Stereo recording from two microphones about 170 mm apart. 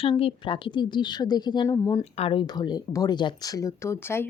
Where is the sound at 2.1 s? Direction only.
35° left (ahead or behind).